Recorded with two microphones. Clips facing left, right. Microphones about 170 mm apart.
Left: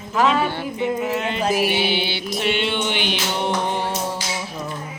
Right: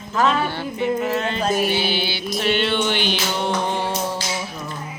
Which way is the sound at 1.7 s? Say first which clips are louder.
Left 1 dB; 20° left (ahead or behind).